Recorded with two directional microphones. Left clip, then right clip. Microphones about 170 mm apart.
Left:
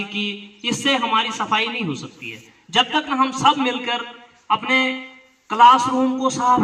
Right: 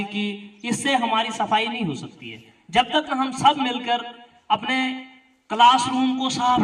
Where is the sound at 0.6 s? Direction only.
30° right (ahead or behind).